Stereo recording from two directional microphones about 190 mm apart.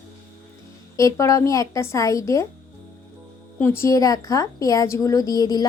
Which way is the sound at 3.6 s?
15° left (ahead or behind).